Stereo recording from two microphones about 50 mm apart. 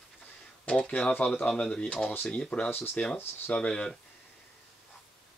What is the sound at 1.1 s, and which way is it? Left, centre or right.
Speech, left.